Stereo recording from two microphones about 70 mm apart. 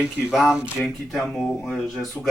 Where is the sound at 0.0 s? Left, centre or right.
Centre.